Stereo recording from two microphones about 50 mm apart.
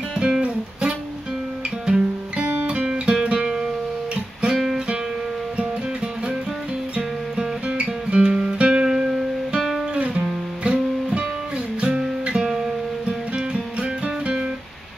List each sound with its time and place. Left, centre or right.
0.2 s music: centre
2.0 s guitar: right
2.6 s music: right
4.1 s guitar: right
7.6 s guitar: right
8.8 s music: centre
10.6 s music: right
13.5 s music: right